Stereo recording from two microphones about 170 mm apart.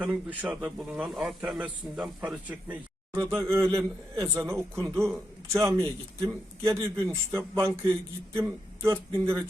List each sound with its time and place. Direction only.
0.0 s a man's voice: 10° right (ahead or behind)